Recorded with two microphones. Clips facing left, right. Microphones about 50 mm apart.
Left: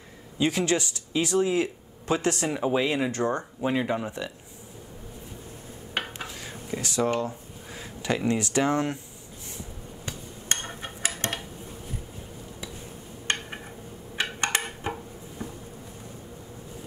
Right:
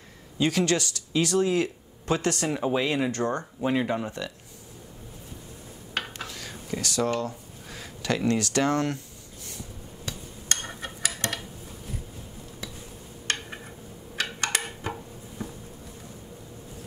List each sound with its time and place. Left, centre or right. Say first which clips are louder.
0.4 s speech: even; left
2.5 s speech: even; centre
3.1 s speech: left 1 dB; left
3.6 s speech: right 1 dB; centre
5.9 s dishes: left 1 dB; left
8.3 s speech: even; centre
10.0 s a sound: even; left
13.3 s a sound: left 1 dB; left
14.6 s dishes: left 1 dB; centre